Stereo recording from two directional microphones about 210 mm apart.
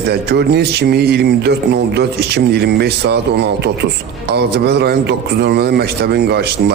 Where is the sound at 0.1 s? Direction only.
50° right (ahead or behind).